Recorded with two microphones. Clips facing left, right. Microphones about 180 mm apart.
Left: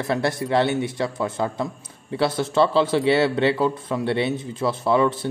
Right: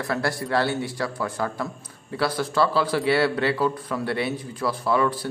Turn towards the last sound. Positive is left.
turn(degrees=25)  # may be behind; listen again after turning